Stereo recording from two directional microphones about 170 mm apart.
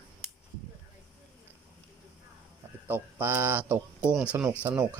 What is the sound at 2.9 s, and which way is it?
Speech, 10° right (ahead or behind).